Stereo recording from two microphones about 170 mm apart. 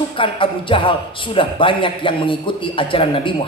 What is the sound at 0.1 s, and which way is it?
Speech, 30° left (ahead or behind).